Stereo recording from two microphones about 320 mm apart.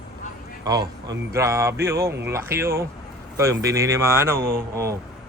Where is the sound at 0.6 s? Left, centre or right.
Centre.